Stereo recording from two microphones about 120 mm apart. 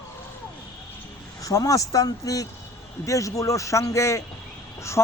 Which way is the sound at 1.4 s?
30° left (ahead or behind).